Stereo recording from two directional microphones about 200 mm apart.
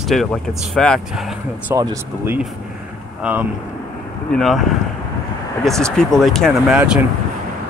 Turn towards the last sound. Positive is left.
turn(degrees=-5)  # may be behind; listen again after turning